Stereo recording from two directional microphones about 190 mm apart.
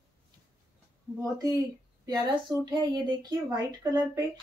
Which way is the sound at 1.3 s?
20° right (ahead or behind).